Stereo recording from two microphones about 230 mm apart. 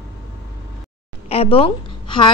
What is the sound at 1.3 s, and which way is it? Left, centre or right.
A woman's voice, left.